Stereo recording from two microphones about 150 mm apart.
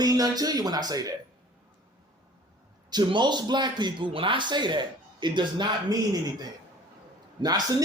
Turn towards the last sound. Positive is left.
turn(degrees=-25)  # may be behind; listen again after turning